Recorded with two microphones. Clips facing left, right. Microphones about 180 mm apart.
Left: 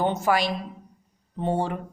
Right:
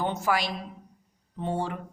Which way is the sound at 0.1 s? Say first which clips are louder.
Left 4 dB; 25° left (ahead or behind).